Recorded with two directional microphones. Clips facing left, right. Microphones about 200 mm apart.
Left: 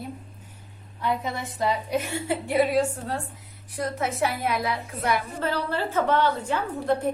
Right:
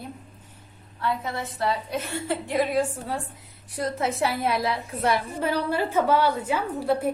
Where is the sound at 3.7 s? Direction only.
30° right (ahead or behind).